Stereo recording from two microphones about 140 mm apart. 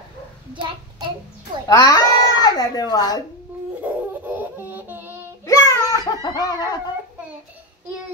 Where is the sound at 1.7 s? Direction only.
30° left (ahead or behind).